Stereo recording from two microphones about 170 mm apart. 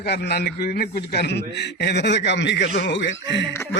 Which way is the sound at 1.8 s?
85° left.